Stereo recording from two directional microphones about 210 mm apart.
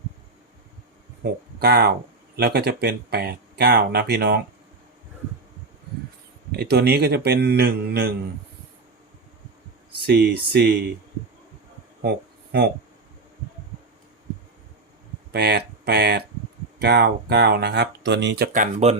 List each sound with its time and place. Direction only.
1.2 s speech: 50° right (ahead or behind)
6.6 s speech: 50° right (ahead or behind)
10.1 s speech: 50° right (ahead or behind)
12.0 s a sound: 50° right (ahead or behind)
15.3 s speech: 50° right (ahead or behind); by 18.9 s 35° right (ahead or behind)